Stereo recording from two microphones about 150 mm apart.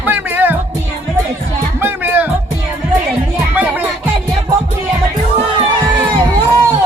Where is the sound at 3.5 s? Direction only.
10° right (ahead or behind).